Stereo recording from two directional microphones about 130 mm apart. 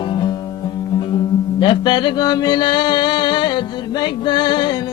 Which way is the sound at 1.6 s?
40° left (ahead or behind).